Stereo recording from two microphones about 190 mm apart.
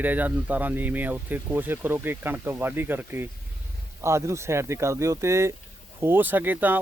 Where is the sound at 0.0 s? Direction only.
10° right (ahead or behind).